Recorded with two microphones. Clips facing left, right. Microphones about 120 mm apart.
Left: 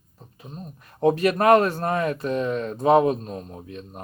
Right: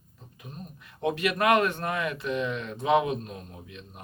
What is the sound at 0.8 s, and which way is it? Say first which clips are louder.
Speech: left 8 dB; 40° left (ahead or behind).